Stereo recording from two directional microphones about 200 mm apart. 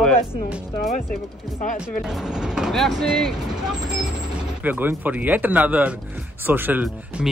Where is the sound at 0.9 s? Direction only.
40° left (ahead or behind).